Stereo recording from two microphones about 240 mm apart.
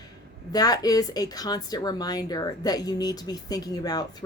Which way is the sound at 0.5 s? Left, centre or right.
Centre.